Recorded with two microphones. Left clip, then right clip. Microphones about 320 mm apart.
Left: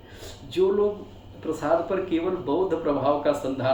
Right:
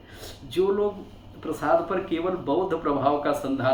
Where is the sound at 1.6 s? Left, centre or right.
Centre.